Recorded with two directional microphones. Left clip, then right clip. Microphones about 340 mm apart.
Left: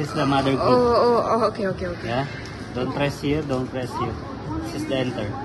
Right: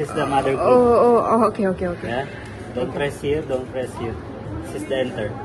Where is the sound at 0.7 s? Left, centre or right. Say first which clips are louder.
Right 4 dB; right.